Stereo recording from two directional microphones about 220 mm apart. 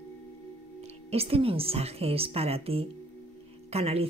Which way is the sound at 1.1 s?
25° right (ahead or behind).